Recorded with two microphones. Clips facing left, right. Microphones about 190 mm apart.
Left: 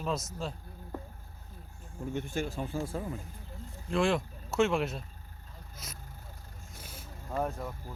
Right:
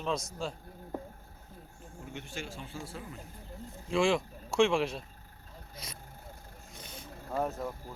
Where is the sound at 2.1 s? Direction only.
50° left (ahead or behind).